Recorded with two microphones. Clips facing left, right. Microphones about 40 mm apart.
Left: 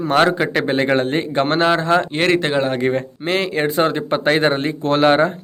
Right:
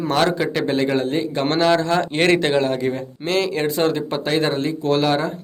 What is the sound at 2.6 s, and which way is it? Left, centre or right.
Speech, left.